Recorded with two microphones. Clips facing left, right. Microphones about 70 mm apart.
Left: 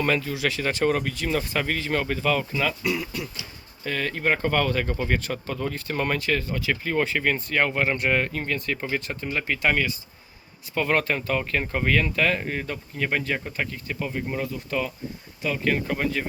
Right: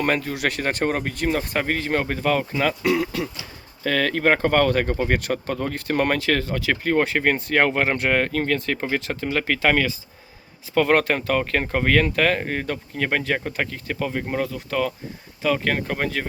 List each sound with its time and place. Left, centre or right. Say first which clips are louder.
0.0 s speech: right 2 dB; right
2.8 s speech: right 6 dB; right
6.9 s speech: right 4 dB; right
7.3 s speech: right 4 dB; right
10.8 s speech: right 5 dB; right